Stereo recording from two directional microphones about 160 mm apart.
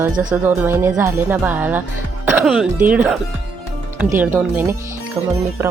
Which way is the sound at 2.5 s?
5° right (ahead or behind).